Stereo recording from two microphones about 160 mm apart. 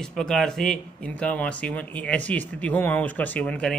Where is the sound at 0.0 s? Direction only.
5° left (ahead or behind).